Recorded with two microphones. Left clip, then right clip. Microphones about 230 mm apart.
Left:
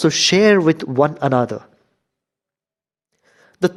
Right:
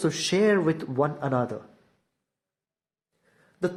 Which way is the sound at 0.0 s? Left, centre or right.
Left.